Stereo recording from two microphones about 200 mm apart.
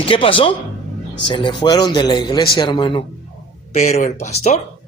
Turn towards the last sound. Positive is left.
turn(degrees=35)  # may be behind; listen again after turning